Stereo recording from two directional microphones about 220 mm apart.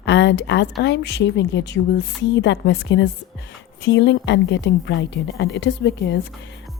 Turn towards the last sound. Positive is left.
turn(degrees=50)  # may be behind; listen again after turning